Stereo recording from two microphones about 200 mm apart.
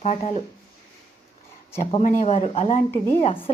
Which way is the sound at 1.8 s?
35° left (ahead or behind).